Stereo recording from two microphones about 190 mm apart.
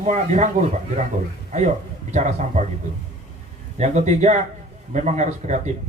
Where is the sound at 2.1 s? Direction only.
40° right (ahead or behind).